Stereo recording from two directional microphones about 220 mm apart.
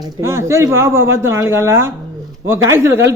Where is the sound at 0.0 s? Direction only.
15° right (ahead or behind).